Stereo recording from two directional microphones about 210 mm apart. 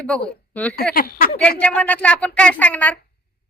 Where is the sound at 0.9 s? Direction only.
45° left (ahead or behind).